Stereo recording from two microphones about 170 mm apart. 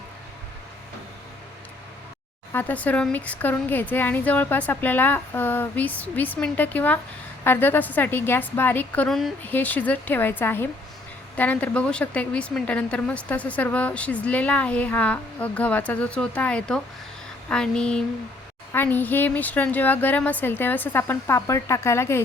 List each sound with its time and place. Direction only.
2.5 s a woman's voice: 10° left (ahead or behind)
17.5 s a sound: 5° left (ahead or behind)
18.7 s a woman's voice: 10° left (ahead or behind)